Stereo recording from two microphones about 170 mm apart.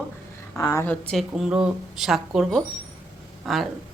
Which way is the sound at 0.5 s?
15° left (ahead or behind).